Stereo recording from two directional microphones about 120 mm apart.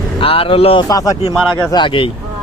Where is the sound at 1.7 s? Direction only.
45° left (ahead or behind).